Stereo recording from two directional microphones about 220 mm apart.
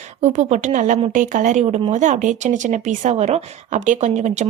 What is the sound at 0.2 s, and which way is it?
A woman's voice, 30° right (ahead or behind).